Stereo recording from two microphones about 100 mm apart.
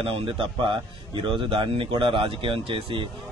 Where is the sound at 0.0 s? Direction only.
65° right (ahead or behind).